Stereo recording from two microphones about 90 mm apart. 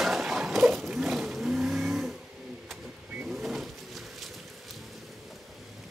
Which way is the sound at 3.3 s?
5° right (ahead or behind).